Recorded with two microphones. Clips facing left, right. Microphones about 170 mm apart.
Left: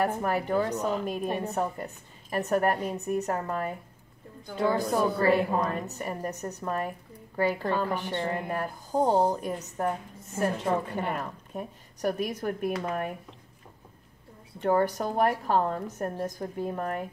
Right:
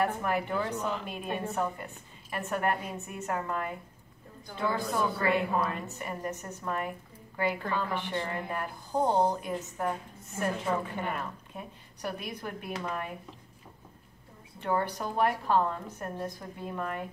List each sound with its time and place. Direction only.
0.0 s a woman's voice: 40° left (ahead or behind)
11.1 s a woman's voice: 45° left (ahead or behind)
14.6 s a woman's voice: 40° left (ahead or behind)